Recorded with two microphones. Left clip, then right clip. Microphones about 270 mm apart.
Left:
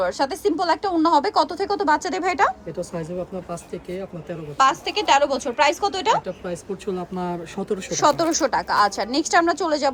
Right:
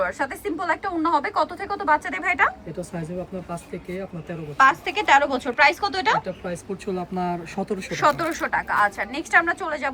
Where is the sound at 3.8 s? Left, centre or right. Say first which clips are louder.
Left 2 dB; centre.